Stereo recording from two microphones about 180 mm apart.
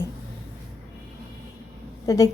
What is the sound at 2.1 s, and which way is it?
Speech, 20° left (ahead or behind).